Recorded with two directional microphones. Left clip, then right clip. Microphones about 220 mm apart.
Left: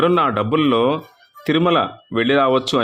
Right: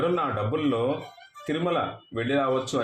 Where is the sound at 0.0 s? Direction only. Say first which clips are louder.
Left 9 dB; 45° left (ahead or behind).